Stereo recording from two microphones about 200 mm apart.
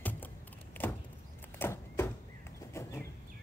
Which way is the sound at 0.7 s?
10° left (ahead or behind).